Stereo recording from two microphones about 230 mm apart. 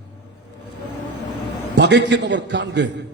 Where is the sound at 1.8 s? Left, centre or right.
Right.